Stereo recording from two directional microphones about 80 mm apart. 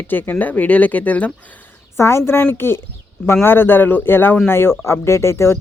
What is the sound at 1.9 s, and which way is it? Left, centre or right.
Speech, left.